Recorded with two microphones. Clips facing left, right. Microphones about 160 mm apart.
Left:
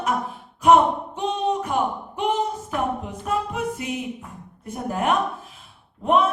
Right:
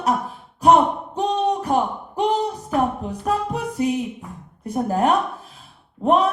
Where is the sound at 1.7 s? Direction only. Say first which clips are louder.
Right 3 dB; 40° right (ahead or behind).